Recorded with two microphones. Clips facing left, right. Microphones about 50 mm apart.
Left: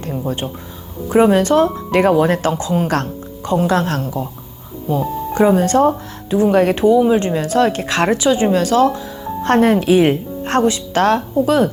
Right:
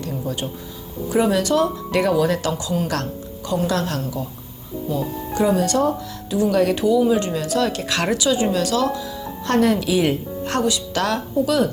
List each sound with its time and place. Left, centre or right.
0.0 s speech: left